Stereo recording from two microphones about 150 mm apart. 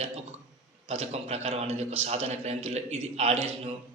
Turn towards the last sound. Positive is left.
turn(degrees=-45)  # may be behind; listen again after turning